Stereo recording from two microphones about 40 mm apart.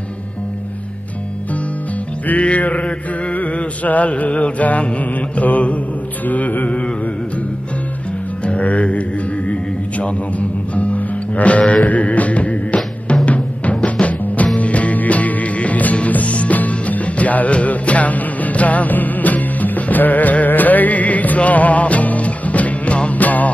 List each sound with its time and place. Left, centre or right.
2.2 s mantra: left
6.2 s music: left
8.5 s speech: left
9.5 s music: left